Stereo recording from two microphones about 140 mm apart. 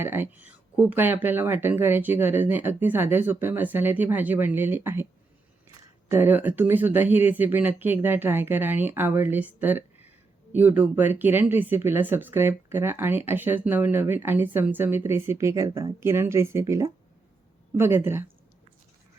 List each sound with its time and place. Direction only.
0.0 s speech: 15° right (ahead or behind)
6.1 s speech: 15° right (ahead or behind)